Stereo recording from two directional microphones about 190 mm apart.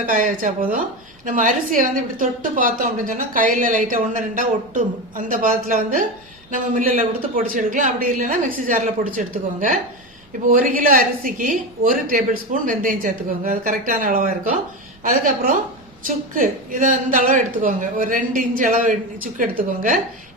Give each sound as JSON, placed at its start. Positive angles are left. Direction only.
{"t": 0.0, "sound": "a woman's voice", "side_deg": -45}
{"t": 16.0, "sound": "a woman's voice", "side_deg": -45}